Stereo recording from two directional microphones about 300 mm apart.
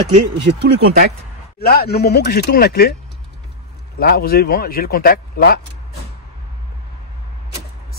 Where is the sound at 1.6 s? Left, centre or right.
Left.